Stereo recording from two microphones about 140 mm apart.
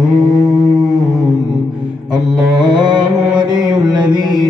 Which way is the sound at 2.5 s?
35° right (ahead or behind).